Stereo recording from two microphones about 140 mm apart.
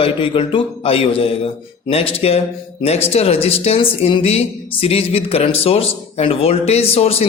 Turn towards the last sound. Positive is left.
turn(degrees=45)  # may be behind; listen again after turning